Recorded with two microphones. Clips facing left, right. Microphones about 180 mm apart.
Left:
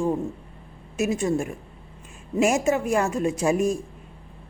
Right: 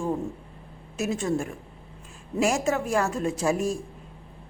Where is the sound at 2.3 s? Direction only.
20° left (ahead or behind).